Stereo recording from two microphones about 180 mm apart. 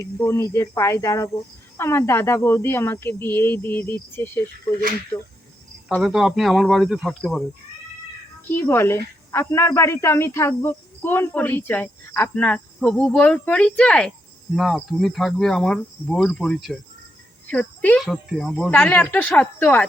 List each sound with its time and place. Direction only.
0.2 s speech: 15° left (ahead or behind)
5.9 s cricket: centre (ahead or behind)
8.4 s speech: 10° left (ahead or behind)
14.5 s cricket: centre (ahead or behind)
17.4 s speech: 10° left (ahead or behind)